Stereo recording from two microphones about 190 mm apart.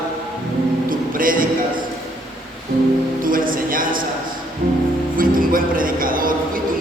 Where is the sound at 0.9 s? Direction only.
45° right (ahead or behind).